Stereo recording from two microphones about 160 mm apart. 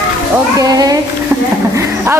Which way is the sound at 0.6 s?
25° right (ahead or behind).